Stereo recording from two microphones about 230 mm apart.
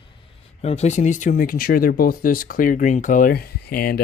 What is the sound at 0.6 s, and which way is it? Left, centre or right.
Speech, left.